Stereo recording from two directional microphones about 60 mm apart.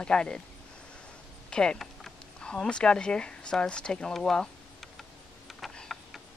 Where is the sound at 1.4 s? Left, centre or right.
Centre.